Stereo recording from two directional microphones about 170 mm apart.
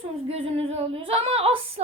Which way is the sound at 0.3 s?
35° right (ahead or behind).